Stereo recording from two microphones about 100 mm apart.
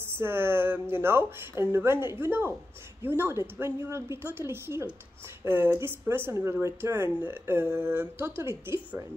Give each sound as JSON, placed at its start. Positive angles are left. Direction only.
{"t": 0.0, "sound": "a woman's voice", "side_deg": -25}